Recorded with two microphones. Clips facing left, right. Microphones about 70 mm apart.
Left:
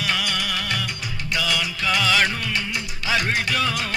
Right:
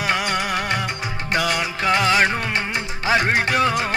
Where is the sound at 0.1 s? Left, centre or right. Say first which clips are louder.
Right 5 dB; right.